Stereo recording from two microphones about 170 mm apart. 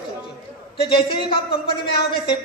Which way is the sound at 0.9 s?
30° left (ahead or behind).